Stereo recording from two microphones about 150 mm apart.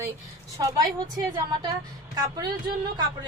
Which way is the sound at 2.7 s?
90° right.